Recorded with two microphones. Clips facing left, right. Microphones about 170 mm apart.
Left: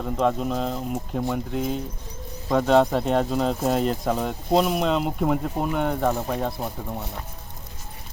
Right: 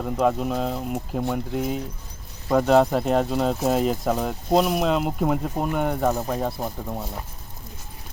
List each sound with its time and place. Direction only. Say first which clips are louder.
0.0 s speech: right 1 dB; 5° right (ahead or behind)